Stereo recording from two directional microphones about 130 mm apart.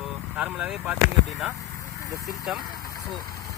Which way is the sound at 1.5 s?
25° left (ahead or behind).